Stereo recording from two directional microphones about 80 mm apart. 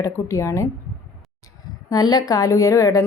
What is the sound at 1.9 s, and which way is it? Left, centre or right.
A woman's voice, left.